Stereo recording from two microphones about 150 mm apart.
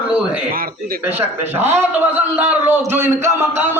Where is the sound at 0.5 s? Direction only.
75° right (ahead or behind).